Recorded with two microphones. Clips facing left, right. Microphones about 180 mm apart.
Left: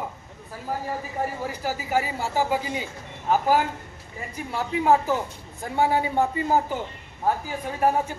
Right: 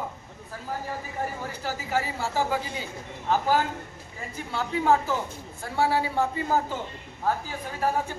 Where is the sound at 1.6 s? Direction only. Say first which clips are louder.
Left 3 dB; 15° left (ahead or behind).